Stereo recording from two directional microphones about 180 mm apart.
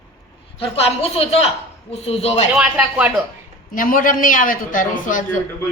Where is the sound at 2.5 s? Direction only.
5° right (ahead or behind).